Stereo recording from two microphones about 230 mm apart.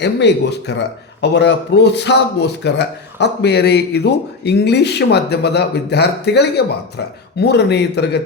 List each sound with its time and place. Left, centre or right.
0.0 s speech: left